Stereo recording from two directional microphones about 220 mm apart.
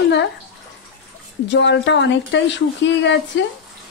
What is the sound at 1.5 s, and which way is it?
Speech, 55° left (ahead or behind).